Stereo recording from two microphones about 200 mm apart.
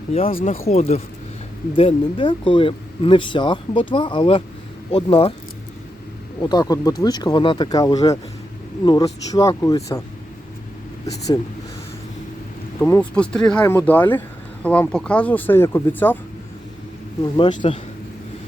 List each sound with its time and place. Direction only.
0.1 s speech: 30° left (ahead or behind)
0.3 s speech: 45° left (ahead or behind)
0.7 s speech: 30° left (ahead or behind)
6.4 s speech: 20° left (ahead or behind)
12.8 s speech: 5° left (ahead or behind)
17.3 s speech: 25° left (ahead or behind)